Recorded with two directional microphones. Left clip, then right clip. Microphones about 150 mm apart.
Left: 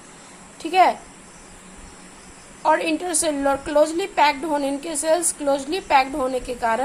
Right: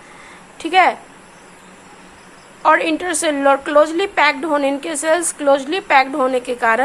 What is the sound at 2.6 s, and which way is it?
A woman's voice, 20° right (ahead or behind).